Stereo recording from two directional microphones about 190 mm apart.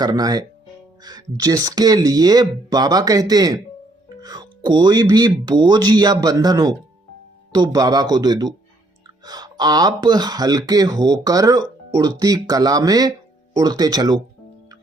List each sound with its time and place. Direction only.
0.0 s speech: 20° right (ahead or behind)